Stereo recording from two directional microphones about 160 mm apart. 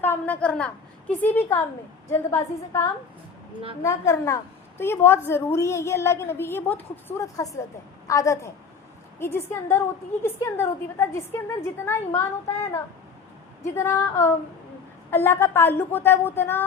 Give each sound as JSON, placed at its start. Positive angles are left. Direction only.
{"t": 0.0, "sound": "a woman's voice", "side_deg": 10}
{"t": 13.7, "sound": "a woman's voice", "side_deg": 15}